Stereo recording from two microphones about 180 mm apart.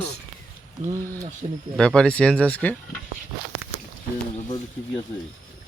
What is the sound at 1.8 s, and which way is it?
Speech, 5° left (ahead or behind).